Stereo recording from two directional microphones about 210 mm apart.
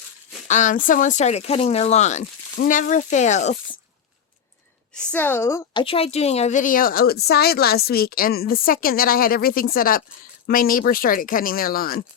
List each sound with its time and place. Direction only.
0.4 s speech: 35° left (ahead or behind)
4.9 s a woman's voice: 10° left (ahead or behind)
5.8 s a woman's voice: 25° left (ahead or behind); by 12.0 s 45° left (ahead or behind)